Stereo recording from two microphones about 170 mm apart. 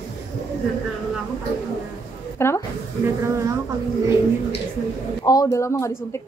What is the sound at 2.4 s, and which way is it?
Speech, 15° left (ahead or behind).